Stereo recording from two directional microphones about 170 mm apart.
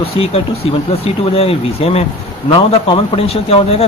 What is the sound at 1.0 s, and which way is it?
Speech, 35° left (ahead or behind).